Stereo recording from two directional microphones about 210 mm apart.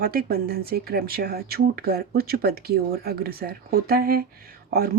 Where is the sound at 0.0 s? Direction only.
45° right (ahead or behind).